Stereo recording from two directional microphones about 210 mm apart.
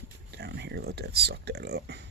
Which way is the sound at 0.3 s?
55° right (ahead or behind).